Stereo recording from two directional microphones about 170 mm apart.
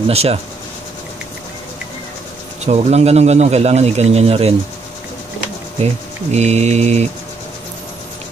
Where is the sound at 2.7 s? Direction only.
40° right (ahead or behind).